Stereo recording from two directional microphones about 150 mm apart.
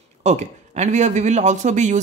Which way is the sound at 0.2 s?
50° right (ahead or behind).